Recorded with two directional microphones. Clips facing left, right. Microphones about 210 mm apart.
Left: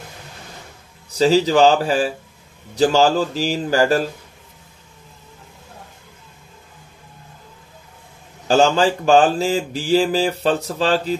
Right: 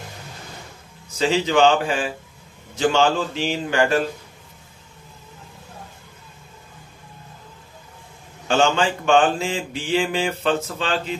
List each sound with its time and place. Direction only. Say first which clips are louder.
1.1 s mantra: left 5 dB; 35° left (ahead or behind)
8.5 s mantra: left 4 dB; 35° left (ahead or behind)